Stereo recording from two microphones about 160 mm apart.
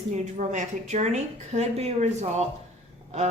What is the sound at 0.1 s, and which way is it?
Speech, 50° right (ahead or behind).